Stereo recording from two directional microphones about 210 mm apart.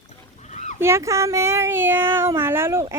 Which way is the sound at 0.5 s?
35° left (ahead or behind).